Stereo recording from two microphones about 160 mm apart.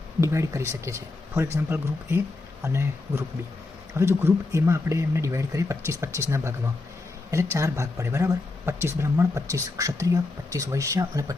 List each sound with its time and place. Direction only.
0.2 s speech: 20° right (ahead or behind)